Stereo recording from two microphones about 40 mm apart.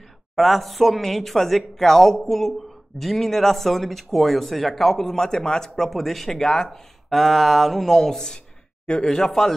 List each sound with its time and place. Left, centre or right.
0.4 s speech: centre
5.9 s speech: centre
9.3 s speech: centre